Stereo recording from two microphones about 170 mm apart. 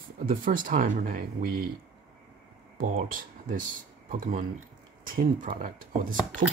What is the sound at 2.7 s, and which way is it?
Speech, 55° right (ahead or behind).